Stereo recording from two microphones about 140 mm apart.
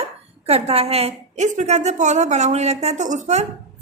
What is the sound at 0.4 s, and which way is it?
A woman's voice, 45° right (ahead or behind).